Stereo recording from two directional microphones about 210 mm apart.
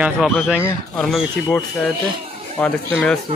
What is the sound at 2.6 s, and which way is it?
Speech, 5° left (ahead or behind).